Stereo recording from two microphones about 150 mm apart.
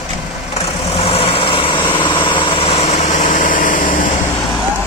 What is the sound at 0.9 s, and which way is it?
Vehicle, 40° left (ahead or behind).